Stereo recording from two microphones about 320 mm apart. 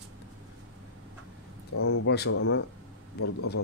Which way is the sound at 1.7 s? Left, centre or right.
Left.